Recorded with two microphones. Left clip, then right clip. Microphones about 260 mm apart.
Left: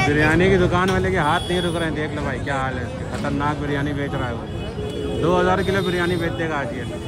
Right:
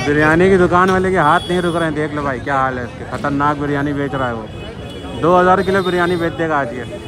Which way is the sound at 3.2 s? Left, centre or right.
Right.